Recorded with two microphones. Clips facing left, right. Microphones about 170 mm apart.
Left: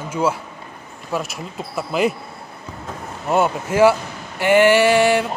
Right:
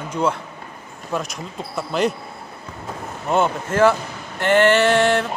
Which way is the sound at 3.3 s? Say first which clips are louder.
Left 1 dB; 5° left (ahead or behind).